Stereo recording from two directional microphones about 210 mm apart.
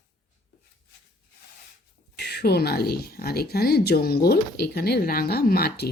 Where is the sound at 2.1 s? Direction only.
50° left (ahead or behind).